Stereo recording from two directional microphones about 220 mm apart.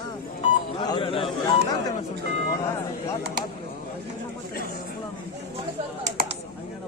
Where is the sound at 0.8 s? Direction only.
20° left (ahead or behind).